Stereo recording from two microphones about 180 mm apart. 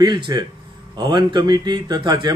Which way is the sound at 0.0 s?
25° right (ahead or behind).